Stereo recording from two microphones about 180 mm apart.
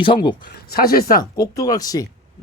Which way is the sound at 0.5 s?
55° left (ahead or behind).